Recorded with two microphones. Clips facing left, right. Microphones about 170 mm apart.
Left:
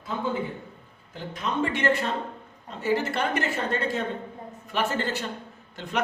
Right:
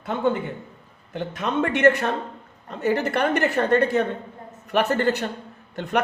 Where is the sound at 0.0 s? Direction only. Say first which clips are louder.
Right 6 dB; 65° right (ahead or behind).